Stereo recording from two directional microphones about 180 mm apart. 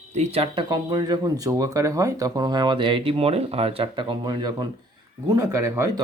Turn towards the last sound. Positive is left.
turn(degrees=-15)  # may be behind; listen again after turning